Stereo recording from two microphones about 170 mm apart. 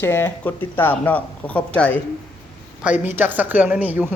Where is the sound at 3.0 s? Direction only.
10° right (ahead or behind).